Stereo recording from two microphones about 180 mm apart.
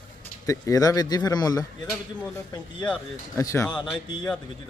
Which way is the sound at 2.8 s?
5° left (ahead or behind).